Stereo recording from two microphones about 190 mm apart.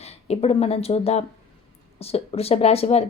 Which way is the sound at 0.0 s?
35° left (ahead or behind).